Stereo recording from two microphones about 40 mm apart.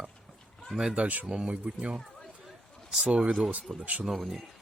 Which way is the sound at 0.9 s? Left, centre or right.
Right.